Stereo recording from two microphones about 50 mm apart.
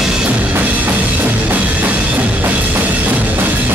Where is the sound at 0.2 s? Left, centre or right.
Right.